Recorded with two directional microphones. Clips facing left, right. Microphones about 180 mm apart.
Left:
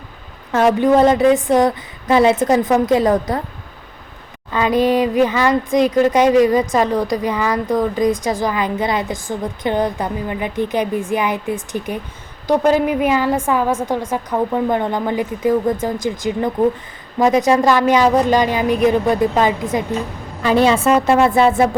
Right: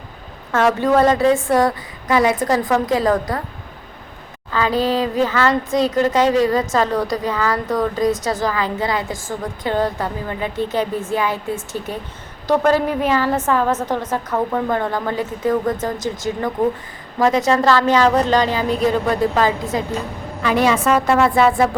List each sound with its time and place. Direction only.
0.5 s a woman's voice: 15° left (ahead or behind)
4.5 s speech: 20° left (ahead or behind)
20.4 s a woman's voice: 30° left (ahead or behind)